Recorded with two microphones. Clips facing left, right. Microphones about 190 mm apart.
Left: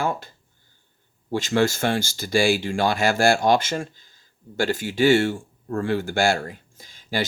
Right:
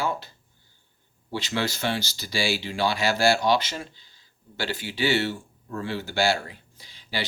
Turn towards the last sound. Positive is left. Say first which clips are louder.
# left 6 dB
turn(degrees=45)  # may be behind; listen again after turning